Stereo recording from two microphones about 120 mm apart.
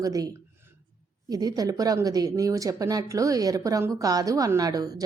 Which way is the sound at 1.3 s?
30° right (ahead or behind).